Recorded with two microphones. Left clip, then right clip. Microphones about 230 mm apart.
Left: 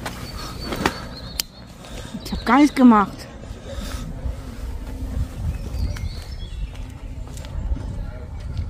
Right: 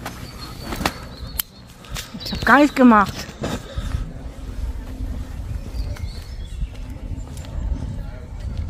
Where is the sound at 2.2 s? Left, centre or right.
Centre.